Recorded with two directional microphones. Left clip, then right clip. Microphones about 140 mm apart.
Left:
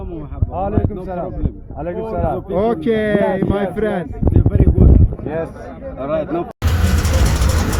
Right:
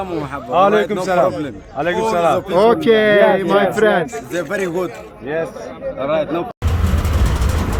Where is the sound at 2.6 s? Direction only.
Centre (ahead or behind).